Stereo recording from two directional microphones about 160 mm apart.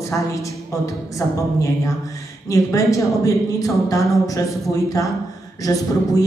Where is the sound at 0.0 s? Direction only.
20° left (ahead or behind).